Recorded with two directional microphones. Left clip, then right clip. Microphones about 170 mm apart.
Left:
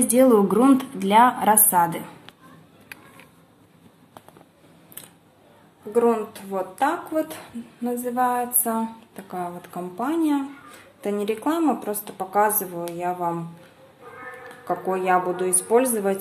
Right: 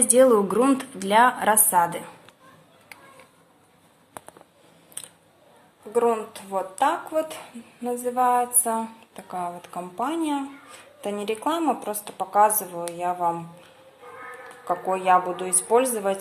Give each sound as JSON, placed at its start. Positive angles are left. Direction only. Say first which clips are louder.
{"t": 0.0, "sound": "speech", "louder": "even", "side_deg": -10}
{"t": 5.9, "sound": "a woman's voice", "louder": "left 2 dB", "side_deg": -10}
{"t": 15.0, "sound": "a woman's voice", "louder": "right 1 dB", "side_deg": 0}